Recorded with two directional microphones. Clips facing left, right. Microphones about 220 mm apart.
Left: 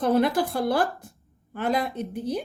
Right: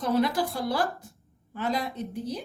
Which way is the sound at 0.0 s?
55° left (ahead or behind).